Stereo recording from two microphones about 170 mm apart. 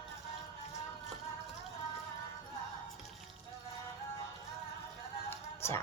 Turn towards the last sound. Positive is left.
turn(degrees=15)  # may be behind; listen again after turning